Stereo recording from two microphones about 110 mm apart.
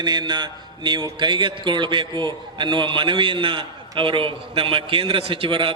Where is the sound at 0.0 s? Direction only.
40° right (ahead or behind).